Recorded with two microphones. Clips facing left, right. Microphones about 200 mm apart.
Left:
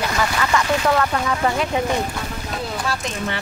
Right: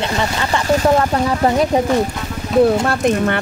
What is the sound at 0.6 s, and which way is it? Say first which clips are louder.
Speech: right 5 dB; 40° right (ahead or behind).